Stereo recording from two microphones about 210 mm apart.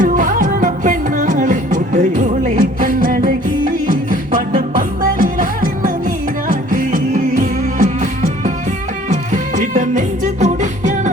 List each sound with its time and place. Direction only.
0.0 s music: 40° right (ahead or behind)
9.3 s music: 35° right (ahead or behind)